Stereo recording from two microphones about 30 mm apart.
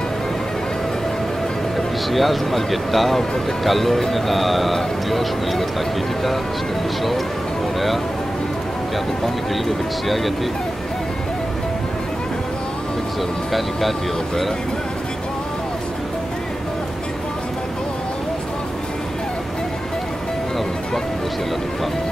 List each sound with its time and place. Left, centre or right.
2.0 s speech: centre
10.0 s speech: centre
13.5 s speech: centre